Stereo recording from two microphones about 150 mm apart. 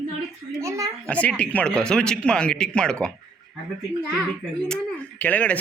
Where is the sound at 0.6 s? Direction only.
20° right (ahead or behind).